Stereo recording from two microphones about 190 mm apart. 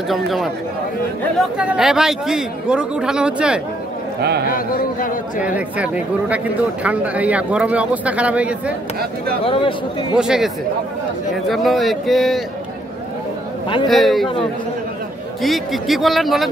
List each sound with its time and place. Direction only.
0.1 s a man's voice: centre (ahead or behind)
4.2 s a man's voice: 60° right (ahead or behind)
4.5 s a man's voice: 50° left (ahead or behind)
5.4 s speech: 5° right (ahead or behind)
9.4 s a man's voice: 30° left (ahead or behind)
10.1 s a man's voice: 5° right (ahead or behind)
13.8 s a man's voice: centre (ahead or behind)
15.4 s a man's voice: centre (ahead or behind)